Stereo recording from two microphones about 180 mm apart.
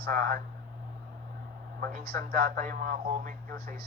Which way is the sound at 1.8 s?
55° right (ahead or behind).